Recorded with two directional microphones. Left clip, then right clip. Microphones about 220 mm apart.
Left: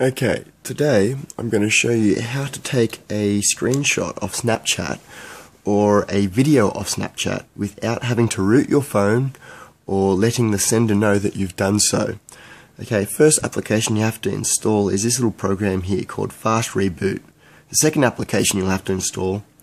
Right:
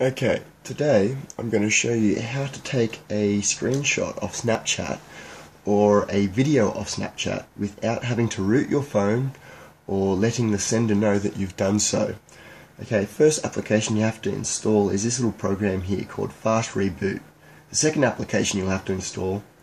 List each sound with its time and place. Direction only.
0.0 s speech: 45° left (ahead or behind)
10.2 s speech: 45° left (ahead or behind)